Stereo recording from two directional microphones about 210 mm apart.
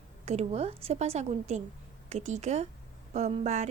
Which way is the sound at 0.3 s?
30° right (ahead or behind).